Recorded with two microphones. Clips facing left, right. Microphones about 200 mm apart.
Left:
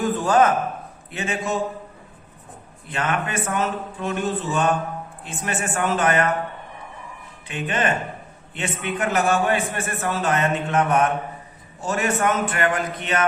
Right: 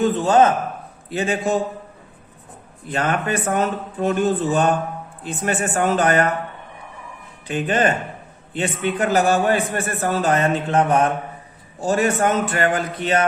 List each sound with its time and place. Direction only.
0.0 s a man's voice: 25° right (ahead or behind)
2.9 s a man's voice: 35° right (ahead or behind)
7.4 s a man's voice: 35° right (ahead or behind)